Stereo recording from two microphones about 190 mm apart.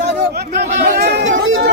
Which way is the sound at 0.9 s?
65° right (ahead or behind).